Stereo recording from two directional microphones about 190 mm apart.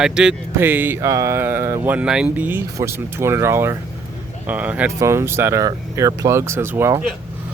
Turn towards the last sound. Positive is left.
turn(degrees=-15)  # may be behind; listen again after turning